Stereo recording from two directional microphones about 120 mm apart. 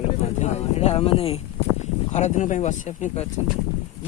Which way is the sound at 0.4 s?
60° left (ahead or behind).